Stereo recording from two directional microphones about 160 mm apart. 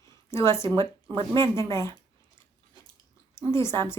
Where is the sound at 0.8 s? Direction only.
30° right (ahead or behind).